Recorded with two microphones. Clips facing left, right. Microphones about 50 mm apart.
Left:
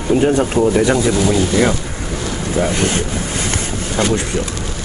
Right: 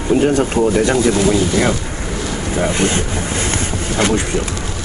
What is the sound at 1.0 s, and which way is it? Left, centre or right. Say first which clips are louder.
Speech: right 1 dB; centre.